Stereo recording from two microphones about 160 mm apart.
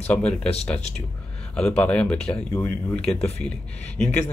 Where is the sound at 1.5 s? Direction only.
5° left (ahead or behind).